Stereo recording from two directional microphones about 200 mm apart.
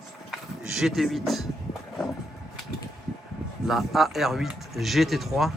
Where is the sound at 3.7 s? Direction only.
Centre (ahead or behind).